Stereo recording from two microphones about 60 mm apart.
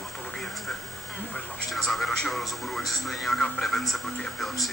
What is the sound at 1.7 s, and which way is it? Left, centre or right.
Speech, centre.